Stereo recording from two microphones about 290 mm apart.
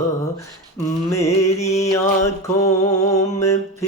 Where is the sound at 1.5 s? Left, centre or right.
Left.